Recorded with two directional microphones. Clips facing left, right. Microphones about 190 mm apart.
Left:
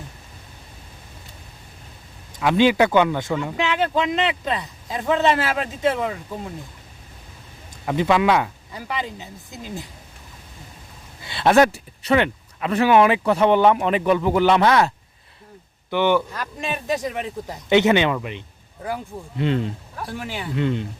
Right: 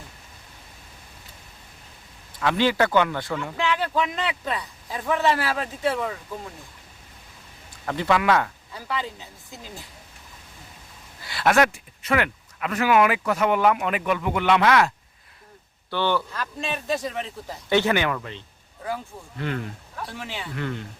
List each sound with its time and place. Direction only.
2.4 s speech: 15° left (ahead or behind)
7.9 s a man's voice: 15° left (ahead or behind)
11.2 s speech: 25° left (ahead or behind)
15.9 s a man's voice: 15° left (ahead or behind)
20.0 s a man's voice: 10° left (ahead or behind)